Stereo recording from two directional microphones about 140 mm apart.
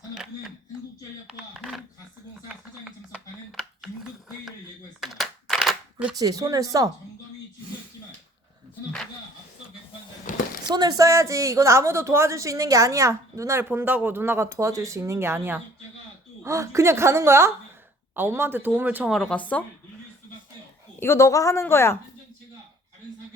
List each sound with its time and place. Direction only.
1.3 s a sound: 5° right (ahead or behind)
4.9 s shuffling cards: centre (ahead or behind)
6.1 s speech: 25° right (ahead or behind)
10.2 s a sound: 75° left (ahead or behind)
10.7 s speech: 30° right (ahead or behind); by 19.6 s 10° left (ahead or behind)
21.0 s speech: 20° left (ahead or behind)